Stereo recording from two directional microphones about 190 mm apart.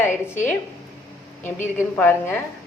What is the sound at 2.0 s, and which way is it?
Speech, 10° left (ahead or behind).